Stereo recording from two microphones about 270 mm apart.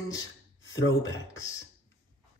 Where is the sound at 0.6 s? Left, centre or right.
Left.